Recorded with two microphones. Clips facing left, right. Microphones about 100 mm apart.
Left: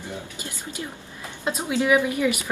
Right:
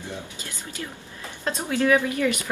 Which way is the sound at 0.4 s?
20° left (ahead or behind).